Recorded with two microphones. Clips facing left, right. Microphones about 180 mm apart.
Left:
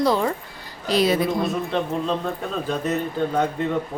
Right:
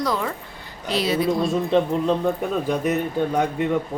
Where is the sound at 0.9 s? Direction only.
45° left (ahead or behind).